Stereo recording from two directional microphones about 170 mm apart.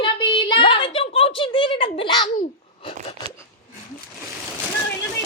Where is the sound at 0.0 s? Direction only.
30° left (ahead or behind).